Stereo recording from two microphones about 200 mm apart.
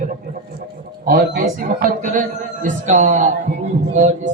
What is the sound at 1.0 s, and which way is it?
A man's voice, 45° right (ahead or behind).